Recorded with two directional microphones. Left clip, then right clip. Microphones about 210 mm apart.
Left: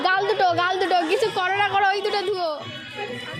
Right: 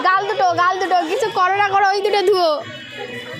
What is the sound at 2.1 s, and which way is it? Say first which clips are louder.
Speech: right 9 dB; 35° right (ahead or behind).